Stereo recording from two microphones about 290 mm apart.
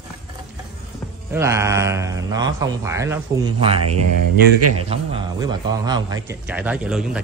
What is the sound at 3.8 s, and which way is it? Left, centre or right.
Speech, right.